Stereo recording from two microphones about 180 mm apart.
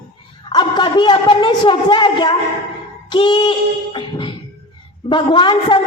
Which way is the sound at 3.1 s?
25° left (ahead or behind).